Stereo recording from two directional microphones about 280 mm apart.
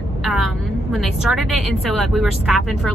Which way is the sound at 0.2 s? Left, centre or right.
Centre.